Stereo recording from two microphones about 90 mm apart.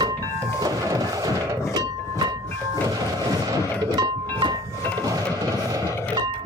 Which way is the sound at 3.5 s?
50° right (ahead or behind).